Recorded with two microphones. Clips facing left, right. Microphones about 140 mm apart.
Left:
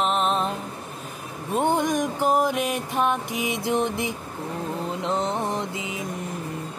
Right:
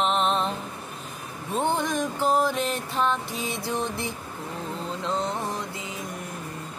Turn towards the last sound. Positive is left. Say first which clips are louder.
# left 4 dB
turn(degrees=20)  # may be behind; listen again after turning